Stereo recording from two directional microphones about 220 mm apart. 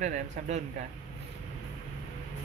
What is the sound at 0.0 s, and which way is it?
Speech, 35° right (ahead or behind).